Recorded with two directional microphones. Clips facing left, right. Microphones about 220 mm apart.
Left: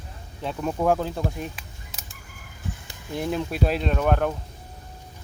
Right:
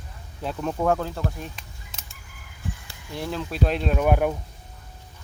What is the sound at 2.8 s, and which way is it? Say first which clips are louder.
Speech: left 5 dB; 20° left (ahead or behind).